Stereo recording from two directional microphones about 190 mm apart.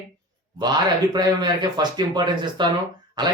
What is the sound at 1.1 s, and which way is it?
Speech, 20° right (ahead or behind).